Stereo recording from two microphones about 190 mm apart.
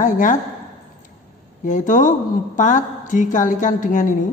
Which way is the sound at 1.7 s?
40° left (ahead or behind).